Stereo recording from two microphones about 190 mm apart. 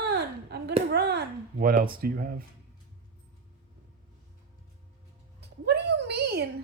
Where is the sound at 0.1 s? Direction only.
60° right (ahead or behind).